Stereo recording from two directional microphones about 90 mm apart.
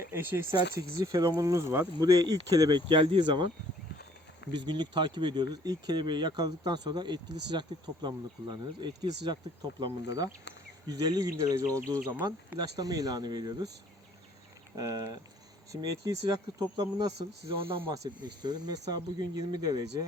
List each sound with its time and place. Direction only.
0.0 s speech: 30° right (ahead or behind)
0.8 s speech: 40° right (ahead or behind)
2.2 s speech: 45° right (ahead or behind)
4.5 s speech: 55° right (ahead or behind)
14.8 s speech: 45° right (ahead or behind)
17.6 s speech: 80° right; by 20.1 s 45° right (ahead or behind)